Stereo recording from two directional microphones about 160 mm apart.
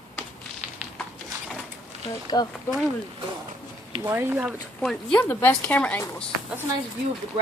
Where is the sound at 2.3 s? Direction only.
25° left (ahead or behind).